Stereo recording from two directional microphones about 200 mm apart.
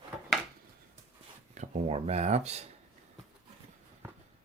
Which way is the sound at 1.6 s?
35° right (ahead or behind).